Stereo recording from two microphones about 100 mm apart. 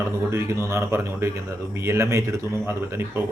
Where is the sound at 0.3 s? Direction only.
25° right (ahead or behind).